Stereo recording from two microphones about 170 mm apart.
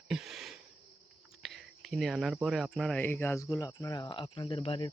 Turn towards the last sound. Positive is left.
turn(degrees=30)  # may be behind; listen again after turning